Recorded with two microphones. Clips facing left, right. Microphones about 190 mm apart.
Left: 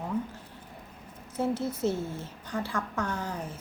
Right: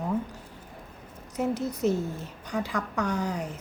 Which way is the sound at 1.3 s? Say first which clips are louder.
Right 1 dB; 15° right (ahead or behind).